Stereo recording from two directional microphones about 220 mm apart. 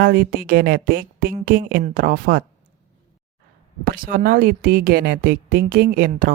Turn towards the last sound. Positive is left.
turn(degrees=-40)  # may be behind; listen again after turning